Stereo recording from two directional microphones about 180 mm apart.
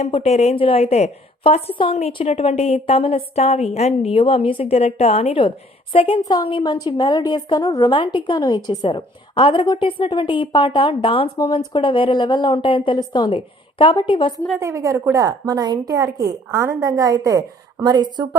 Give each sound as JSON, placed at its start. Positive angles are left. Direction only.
{"t": 0.0, "sound": "a woman's voice", "side_deg": 35}
{"t": 14.6, "sound": "a woman's voice", "side_deg": -15}